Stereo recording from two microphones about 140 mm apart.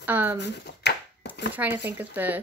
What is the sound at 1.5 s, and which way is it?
Speech, 15° right (ahead or behind).